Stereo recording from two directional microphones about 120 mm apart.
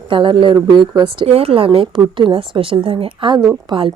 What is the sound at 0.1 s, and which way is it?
A woman's voice, 45° right (ahead or behind).